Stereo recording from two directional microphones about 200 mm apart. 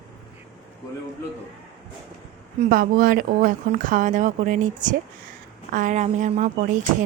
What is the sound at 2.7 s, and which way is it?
Speech, 45° right (ahead or behind).